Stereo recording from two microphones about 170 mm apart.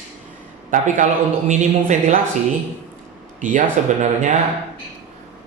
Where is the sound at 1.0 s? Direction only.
50° right (ahead or behind).